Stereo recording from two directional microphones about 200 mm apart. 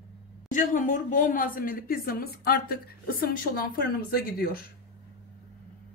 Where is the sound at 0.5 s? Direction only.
40° left (ahead or behind).